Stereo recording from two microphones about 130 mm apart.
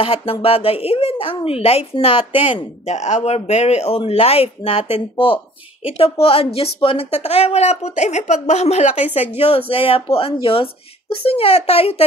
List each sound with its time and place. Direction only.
0.0 s a woman's voice: 45° left (ahead or behind)